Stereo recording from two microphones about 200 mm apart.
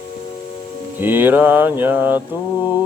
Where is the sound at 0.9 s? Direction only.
10° right (ahead or behind).